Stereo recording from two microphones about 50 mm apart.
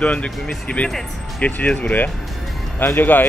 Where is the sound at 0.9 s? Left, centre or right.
Centre.